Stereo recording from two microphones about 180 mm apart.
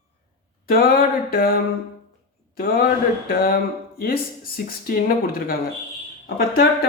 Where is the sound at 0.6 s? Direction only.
55° left (ahead or behind).